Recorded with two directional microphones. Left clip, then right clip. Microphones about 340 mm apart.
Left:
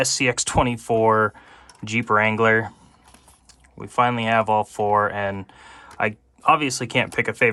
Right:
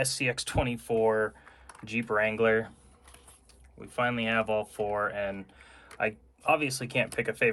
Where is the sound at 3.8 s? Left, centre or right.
Centre.